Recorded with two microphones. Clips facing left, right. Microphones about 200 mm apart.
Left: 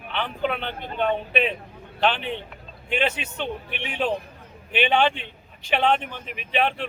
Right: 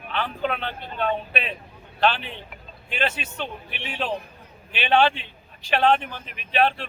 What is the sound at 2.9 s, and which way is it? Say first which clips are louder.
Speech: left 2 dB; 15° left (ahead or behind).